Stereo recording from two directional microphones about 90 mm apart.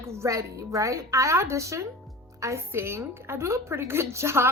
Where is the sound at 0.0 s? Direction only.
35° right (ahead or behind).